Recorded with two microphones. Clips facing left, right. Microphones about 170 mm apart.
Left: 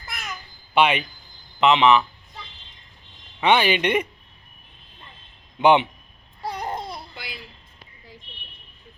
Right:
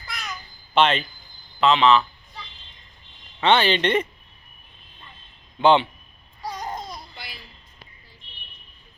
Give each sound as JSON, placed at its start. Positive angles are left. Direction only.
{"t": 0.0, "sound": "babbling", "side_deg": 50}
{"t": 0.7, "sound": "speech", "side_deg": 10}
{"t": 3.4, "sound": "speech", "side_deg": 10}
{"t": 5.5, "sound": "speech", "side_deg": 20}
{"t": 6.6, "sound": "babbling", "side_deg": 30}